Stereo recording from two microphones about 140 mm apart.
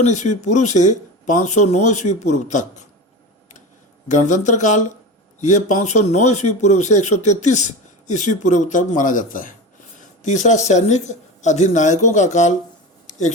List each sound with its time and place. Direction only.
0.0 s speech: 60° left (ahead or behind)
4.1 s speech: 60° left (ahead or behind)
10.2 s speech: 60° left (ahead or behind)
13.1 s a sound: 60° left (ahead or behind)